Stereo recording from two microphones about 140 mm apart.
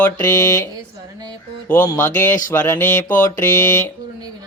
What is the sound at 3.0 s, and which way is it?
Mantra, 70° left (ahead or behind).